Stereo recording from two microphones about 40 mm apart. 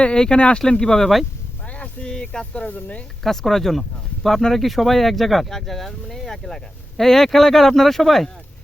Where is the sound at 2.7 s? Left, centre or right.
Left.